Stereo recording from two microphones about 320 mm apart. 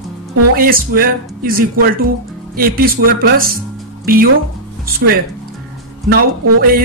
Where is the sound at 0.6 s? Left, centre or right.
Right.